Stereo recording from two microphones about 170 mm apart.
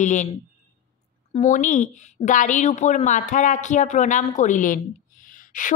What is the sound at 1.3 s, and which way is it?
A woman's voice, 50° left (ahead or behind).